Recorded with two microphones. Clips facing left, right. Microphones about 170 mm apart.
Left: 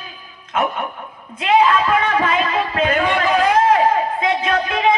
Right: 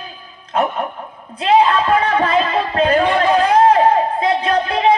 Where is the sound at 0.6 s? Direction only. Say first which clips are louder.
Right 2 dB; 35° right (ahead or behind).